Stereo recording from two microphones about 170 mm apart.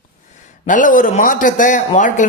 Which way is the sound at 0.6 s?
50° left (ahead or behind).